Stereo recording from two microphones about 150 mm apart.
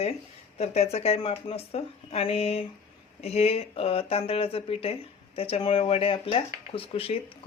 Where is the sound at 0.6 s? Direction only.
45° left (ahead or behind).